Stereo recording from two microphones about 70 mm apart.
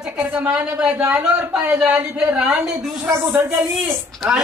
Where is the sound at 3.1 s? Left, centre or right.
Right.